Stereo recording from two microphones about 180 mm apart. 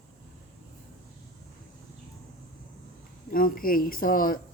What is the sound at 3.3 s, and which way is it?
Speech, 50° left (ahead or behind).